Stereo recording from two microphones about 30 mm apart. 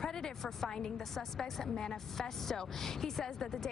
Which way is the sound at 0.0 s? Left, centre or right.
Centre.